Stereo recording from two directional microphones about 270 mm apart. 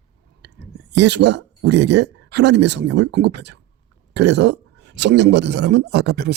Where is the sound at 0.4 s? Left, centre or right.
Right.